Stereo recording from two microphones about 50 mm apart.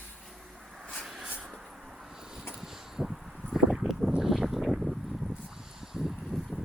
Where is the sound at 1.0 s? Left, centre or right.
Centre.